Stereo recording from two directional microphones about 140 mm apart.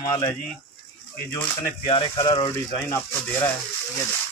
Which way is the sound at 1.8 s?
35° left (ahead or behind).